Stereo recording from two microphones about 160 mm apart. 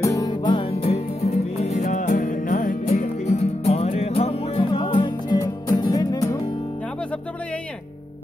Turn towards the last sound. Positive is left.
turn(degrees=25)  # may be behind; listen again after turning